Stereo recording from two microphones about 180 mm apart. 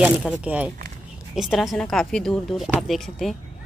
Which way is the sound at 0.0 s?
5° right (ahead or behind).